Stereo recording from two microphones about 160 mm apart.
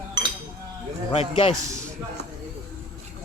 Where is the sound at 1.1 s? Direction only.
35° left (ahead or behind).